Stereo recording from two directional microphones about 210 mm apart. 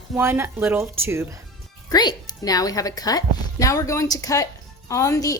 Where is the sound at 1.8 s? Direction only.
20° left (ahead or behind).